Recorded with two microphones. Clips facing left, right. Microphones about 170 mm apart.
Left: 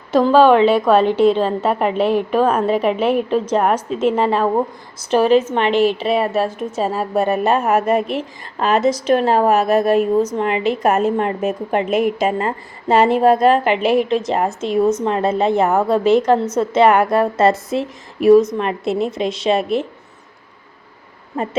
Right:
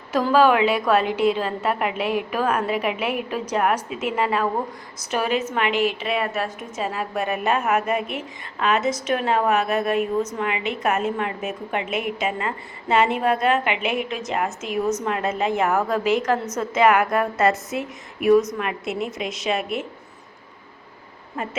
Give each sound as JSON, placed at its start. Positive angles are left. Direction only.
{"t": 0.1, "sound": "a woman's voice", "side_deg": 30}
{"t": 21.4, "sound": "a woman's voice", "side_deg": 30}